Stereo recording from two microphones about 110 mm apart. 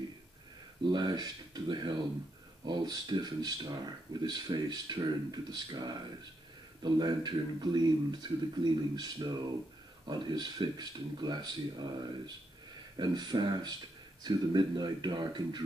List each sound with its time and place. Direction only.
0.8 s speech: 45° right (ahead or behind)
12.9 s speech: 40° right (ahead or behind)